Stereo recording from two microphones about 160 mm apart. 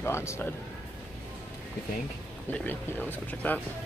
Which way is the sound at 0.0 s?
15° left (ahead or behind).